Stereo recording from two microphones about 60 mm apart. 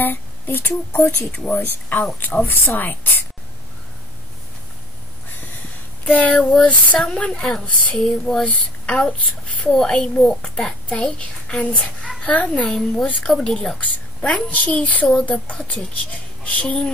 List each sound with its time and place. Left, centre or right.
0.0 s a woman's voice: left
6.1 s a woman's voice: left; by 12.2 s centre
12.2 s a woman's voice: left
12.7 s a child's voice: centre
14.5 s a woman's voice: left